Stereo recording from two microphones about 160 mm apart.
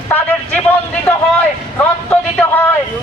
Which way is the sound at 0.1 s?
10° left (ahead or behind).